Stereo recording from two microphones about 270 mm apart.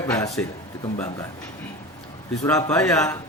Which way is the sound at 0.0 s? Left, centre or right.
Centre.